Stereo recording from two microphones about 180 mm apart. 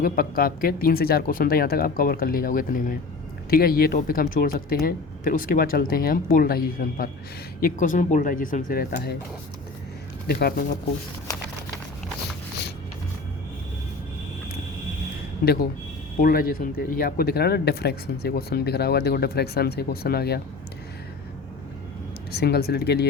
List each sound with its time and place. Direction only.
0.0 s speech: 55° left (ahead or behind)
10.2 s speech: 60° left (ahead or behind)
15.4 s speech: 65° left (ahead or behind)
22.4 s speech: 60° left (ahead or behind)